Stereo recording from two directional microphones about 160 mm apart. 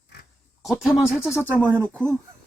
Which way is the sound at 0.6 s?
5° right (ahead or behind).